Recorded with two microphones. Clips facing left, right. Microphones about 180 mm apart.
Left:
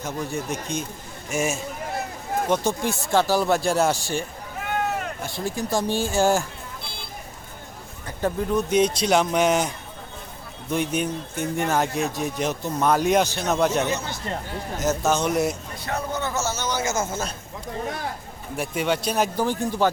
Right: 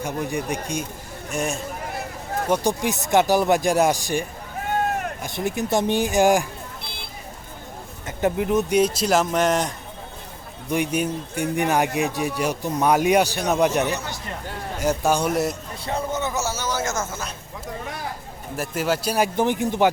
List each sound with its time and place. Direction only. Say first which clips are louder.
0.0 s speech: right 3 dB; 15° right (ahead or behind)
1.3 s a man's voice: left 1 dB; centre (ahead or behind)
2.5 s speech: right 3 dB; 15° right (ahead or behind)
8.0 s speech: right 3 dB; 20° right (ahead or behind)
8.8 s a man's voice: even; 5° right (ahead or behind)
10.7 s speech: right 2 dB; 10° right (ahead or behind)
15.3 s a man's voice: even; centre (ahead or behind)
15.8 s speech: right 2 dB; 25° right (ahead or behind); by 16.9 s 5° right (ahead or behind)
17.0 s a man's voice: left 3 dB; 30° left (ahead or behind)
18.5 s a man's voice: even; centre (ahead or behind)
19.4 s speech: right 3 dB; 20° right (ahead or behind)